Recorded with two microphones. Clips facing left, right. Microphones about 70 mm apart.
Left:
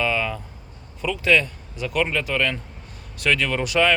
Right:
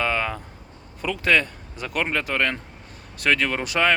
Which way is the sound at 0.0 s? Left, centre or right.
Right.